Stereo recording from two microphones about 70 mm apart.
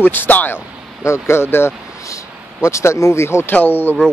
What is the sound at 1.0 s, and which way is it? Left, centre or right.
Speech, left.